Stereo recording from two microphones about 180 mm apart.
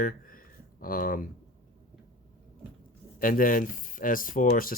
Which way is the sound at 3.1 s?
50° left (ahead or behind).